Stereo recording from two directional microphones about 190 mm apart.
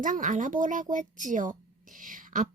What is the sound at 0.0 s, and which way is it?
Speech, 40° right (ahead or behind).